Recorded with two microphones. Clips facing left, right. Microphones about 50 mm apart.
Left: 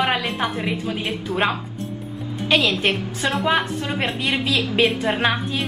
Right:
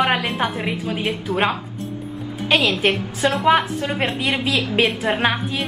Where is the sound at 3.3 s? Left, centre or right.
Centre.